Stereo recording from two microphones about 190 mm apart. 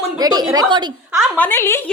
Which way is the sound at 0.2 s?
20° right (ahead or behind).